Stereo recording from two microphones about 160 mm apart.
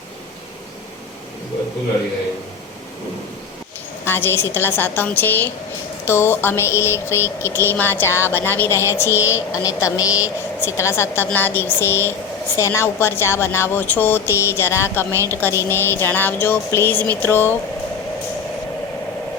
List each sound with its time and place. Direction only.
4.0 s a woman's voice: 15° left (ahead or behind)